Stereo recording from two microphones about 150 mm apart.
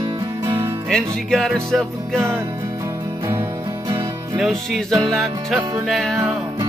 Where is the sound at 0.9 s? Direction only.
Centre (ahead or behind).